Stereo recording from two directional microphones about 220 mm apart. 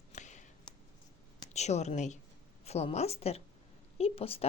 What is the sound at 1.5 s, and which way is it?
A woman's voice, 30° left (ahead or behind).